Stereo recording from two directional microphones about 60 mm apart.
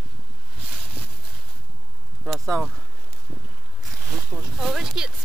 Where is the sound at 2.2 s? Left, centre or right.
Centre.